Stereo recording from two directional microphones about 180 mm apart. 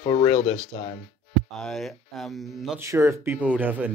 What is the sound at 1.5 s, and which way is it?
Speech, centre (ahead or behind).